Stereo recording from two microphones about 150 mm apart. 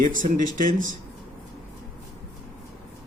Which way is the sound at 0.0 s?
60° right (ahead or behind).